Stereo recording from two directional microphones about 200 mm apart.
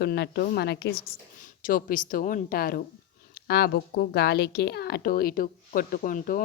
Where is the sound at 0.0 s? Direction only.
50° left (ahead or behind).